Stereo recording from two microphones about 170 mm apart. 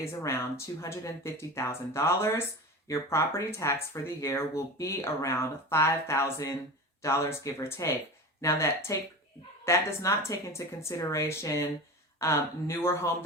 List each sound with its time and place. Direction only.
0.0 s speech: 15° left (ahead or behind)